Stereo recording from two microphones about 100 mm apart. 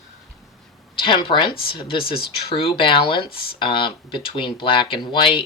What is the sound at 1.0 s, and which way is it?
Speech, 55° left (ahead or behind).